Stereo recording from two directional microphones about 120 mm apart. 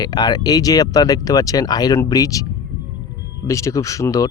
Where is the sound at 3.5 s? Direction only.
25° left (ahead or behind).